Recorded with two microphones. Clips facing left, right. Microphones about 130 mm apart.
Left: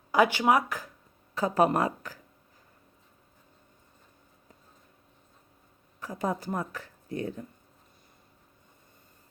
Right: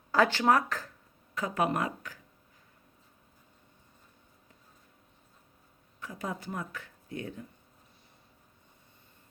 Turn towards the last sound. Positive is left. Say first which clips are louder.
# left 5 dB
turn(degrees=35)  # may be behind; listen again after turning